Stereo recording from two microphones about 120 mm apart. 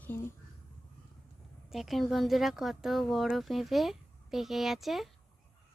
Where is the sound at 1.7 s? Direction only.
Centre (ahead or behind).